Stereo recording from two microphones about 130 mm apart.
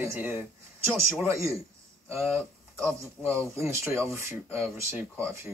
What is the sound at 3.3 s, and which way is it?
Speech, 20° right (ahead or behind).